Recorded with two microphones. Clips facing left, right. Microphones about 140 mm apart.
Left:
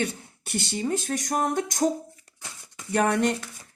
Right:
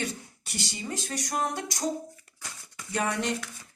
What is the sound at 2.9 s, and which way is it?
Speech, 55° left (ahead or behind).